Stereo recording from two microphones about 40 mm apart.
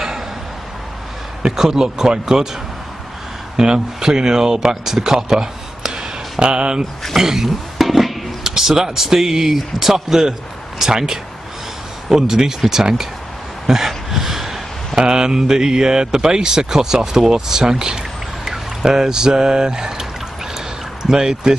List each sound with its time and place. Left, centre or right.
1.4 s speech: centre
3.5 s speech: centre
7.2 s speech: centre
13.7 s a sound: centre
15.0 s speech: centre